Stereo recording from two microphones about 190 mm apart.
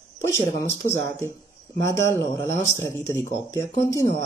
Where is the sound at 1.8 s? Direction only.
15° left (ahead or behind).